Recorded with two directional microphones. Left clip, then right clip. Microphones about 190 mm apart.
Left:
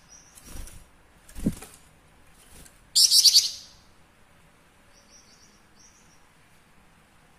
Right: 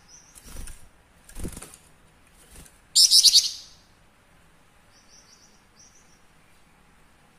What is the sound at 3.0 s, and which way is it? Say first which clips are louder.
Bird: right 1 dB; 5° right (ahead or behind).